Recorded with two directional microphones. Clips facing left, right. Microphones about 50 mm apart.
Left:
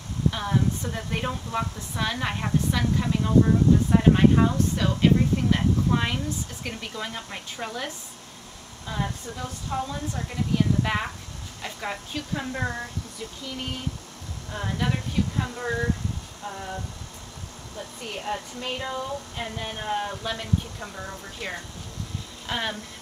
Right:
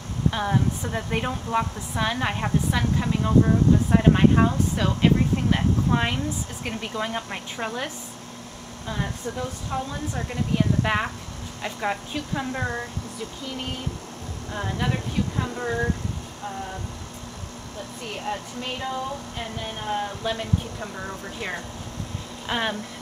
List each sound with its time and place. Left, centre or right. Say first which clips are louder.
0.3 s a woman's voice: right 2 dB; centre
9.7 s a woman's voice: even; centre
14.5 s a woman's voice: right 1 dB; centre
18.2 s a woman's voice: even; centre